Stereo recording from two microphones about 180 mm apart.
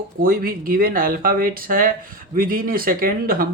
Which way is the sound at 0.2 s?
55° right (ahead or behind).